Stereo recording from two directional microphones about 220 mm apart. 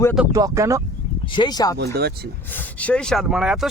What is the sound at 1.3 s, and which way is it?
Speech, 20° left (ahead or behind).